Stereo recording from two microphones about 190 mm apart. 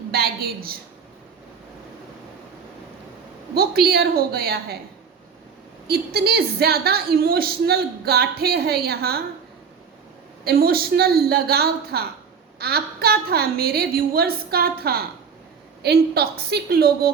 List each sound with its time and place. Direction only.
0.1 s a woman's voice: 55° right (ahead or behind)
3.5 s a woman's voice: 55° right (ahead or behind)
5.9 s a woman's voice: 55° right (ahead or behind)
10.4 s a woman's voice: 55° right (ahead or behind)